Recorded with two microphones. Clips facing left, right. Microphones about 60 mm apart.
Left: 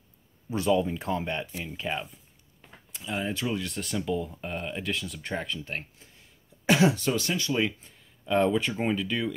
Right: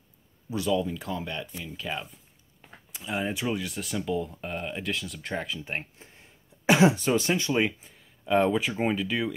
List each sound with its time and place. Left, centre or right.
0.5 s speech: left
1.8 s speech: centre
2.9 s speech: centre
5.6 s speech: right
7.8 s speech: centre